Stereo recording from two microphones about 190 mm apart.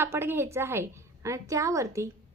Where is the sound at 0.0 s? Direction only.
10° right (ahead or behind).